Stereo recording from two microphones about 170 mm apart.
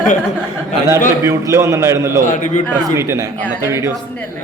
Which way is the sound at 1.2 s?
15° right (ahead or behind).